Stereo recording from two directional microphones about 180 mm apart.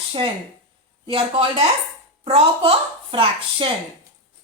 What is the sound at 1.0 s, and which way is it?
Speech, 30° right (ahead or behind).